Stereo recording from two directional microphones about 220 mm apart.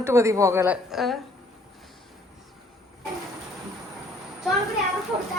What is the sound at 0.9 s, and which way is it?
Speech, centre (ahead or behind).